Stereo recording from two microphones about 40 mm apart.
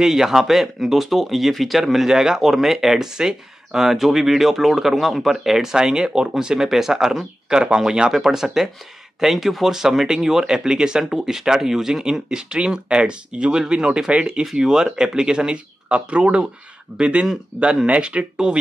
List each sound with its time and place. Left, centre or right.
0.0 s speech: centre
2.0 s speech: centre